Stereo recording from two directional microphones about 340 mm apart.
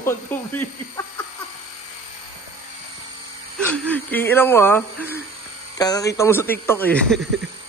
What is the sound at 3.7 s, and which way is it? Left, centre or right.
A man's voice, centre.